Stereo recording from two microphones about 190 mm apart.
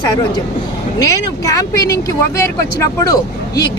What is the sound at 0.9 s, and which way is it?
Speech, 20° left (ahead or behind).